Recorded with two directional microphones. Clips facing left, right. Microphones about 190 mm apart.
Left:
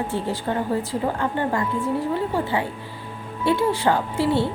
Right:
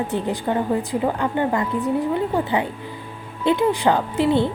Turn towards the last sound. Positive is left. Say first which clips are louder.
# right 3 dB
turn(degrees=-20)  # may be behind; listen again after turning